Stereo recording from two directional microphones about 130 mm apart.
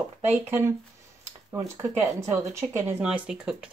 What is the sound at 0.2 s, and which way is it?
Speech, 15° right (ahead or behind).